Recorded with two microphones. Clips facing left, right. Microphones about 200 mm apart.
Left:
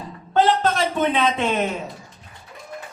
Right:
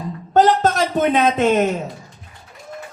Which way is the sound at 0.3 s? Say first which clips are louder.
Right 4 dB; 40° right (ahead or behind).